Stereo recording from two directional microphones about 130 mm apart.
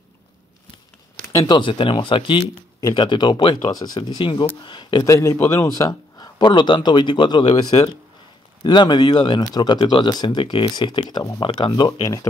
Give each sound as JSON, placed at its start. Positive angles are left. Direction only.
{"t": 1.4, "sound": "speech", "side_deg": 40}
{"t": 5.0, "sound": "speech", "side_deg": 25}